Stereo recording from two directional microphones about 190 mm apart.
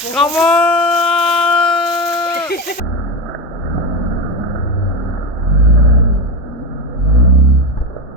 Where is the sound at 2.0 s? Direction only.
20° left (ahead or behind).